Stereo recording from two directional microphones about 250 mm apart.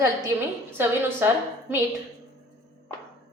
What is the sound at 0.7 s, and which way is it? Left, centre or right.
A woman's voice, centre.